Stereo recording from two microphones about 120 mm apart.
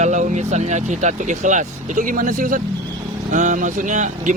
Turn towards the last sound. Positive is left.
turn(degrees=-90)